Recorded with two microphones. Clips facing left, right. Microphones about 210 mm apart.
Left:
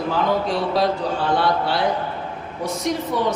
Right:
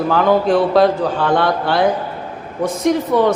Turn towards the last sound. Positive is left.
turn(degrees=-55)  # may be behind; listen again after turning